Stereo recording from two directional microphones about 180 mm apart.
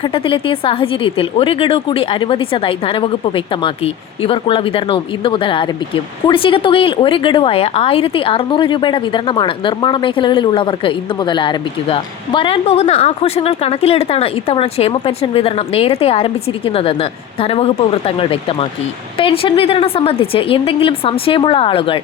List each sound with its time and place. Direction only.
0.0 s a woman's voice: 30° left (ahead or behind)